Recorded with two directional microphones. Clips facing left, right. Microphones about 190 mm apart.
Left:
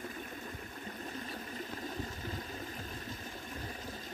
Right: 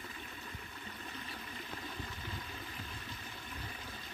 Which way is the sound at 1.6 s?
40° left (ahead or behind).